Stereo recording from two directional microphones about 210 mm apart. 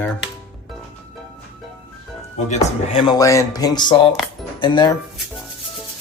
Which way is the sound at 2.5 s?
25° left (ahead or behind).